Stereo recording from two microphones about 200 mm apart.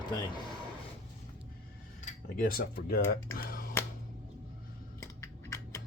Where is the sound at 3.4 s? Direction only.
45° left (ahead or behind).